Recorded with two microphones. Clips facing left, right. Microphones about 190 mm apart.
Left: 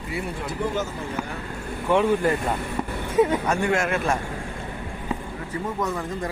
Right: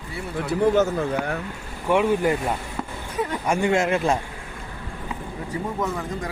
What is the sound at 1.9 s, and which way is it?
Speech, 15° right (ahead or behind).